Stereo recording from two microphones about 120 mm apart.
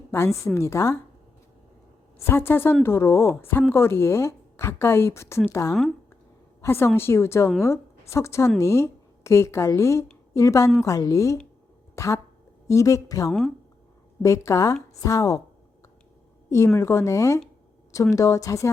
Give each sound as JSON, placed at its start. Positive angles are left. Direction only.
{"t": 0.1, "sound": "speech", "side_deg": 20}
{"t": 2.1, "sound": "a woman's voice", "side_deg": 20}
{"t": 16.7, "sound": "speech", "side_deg": 20}